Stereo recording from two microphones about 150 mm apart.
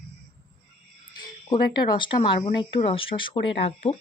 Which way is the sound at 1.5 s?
30° left (ahead or behind).